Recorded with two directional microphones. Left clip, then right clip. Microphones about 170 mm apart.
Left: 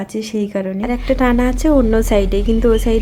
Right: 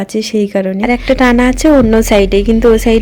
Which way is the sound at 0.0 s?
30° right (ahead or behind).